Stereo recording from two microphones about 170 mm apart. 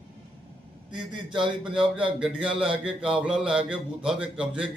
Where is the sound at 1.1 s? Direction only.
25° right (ahead or behind).